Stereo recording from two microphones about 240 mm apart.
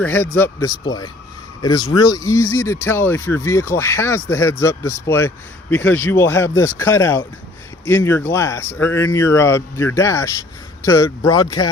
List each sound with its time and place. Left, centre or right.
0.0 s speech: centre